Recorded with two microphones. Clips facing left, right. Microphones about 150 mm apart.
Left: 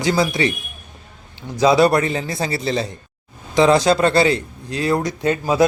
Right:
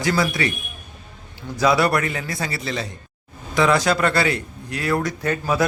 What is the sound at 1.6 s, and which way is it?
A man's voice, 25° left (ahead or behind).